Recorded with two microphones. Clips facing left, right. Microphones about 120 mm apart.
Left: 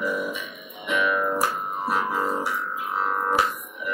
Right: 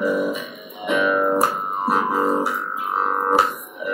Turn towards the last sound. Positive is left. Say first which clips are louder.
# right 4 dB
turn(degrees=-30)  # may be behind; listen again after turning